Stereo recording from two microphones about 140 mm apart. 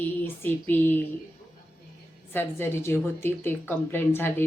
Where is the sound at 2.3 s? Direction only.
15° left (ahead or behind).